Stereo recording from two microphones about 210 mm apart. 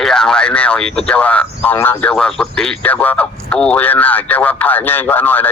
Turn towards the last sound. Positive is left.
turn(degrees=10)  # may be behind; listen again after turning